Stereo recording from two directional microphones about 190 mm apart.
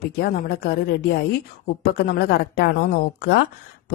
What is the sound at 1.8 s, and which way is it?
A woman's voice, 55° left (ahead or behind).